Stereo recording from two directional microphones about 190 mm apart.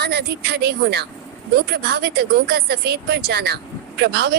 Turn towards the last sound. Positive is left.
turn(degrees=-55)  # may be behind; listen again after turning